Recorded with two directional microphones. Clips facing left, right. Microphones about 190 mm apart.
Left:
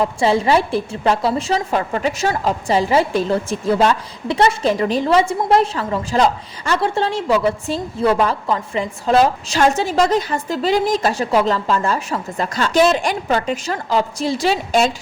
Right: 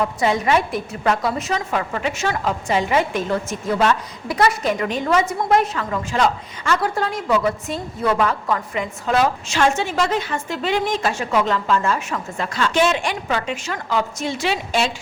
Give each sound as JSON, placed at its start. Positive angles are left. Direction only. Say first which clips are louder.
{"t": 0.0, "sound": "a woman's voice", "louder": "left 3 dB", "side_deg": 30}